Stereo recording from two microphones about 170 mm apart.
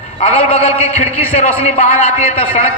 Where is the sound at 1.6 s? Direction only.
45° left (ahead or behind).